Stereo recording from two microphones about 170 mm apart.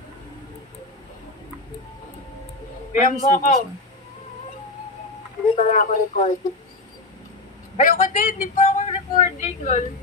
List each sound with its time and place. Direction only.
2.9 s speech: 50° left (ahead or behind)
5.6 s speech: 50° left (ahead or behind)
7.7 s speech: 55° left (ahead or behind)